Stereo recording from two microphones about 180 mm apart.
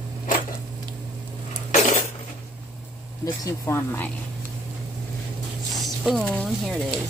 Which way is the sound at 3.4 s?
15° left (ahead or behind).